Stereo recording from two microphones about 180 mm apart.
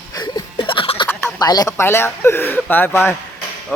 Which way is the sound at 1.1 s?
5° left (ahead or behind).